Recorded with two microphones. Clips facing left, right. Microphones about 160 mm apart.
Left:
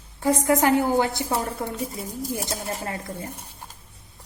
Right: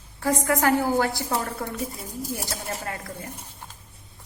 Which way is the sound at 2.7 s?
25° left (ahead or behind).